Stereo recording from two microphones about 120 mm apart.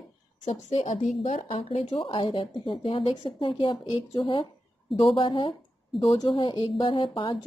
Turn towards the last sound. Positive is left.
turn(degrees=45)  # may be behind; listen again after turning